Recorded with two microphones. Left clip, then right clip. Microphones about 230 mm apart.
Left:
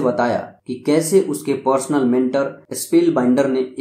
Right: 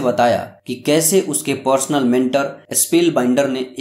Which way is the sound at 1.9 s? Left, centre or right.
Right.